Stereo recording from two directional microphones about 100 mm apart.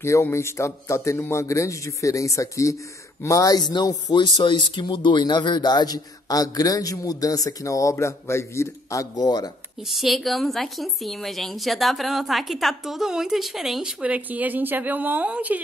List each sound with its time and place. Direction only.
0.0 s a man's voice: 25° left (ahead or behind)
9.8 s a woman's voice: centre (ahead or behind)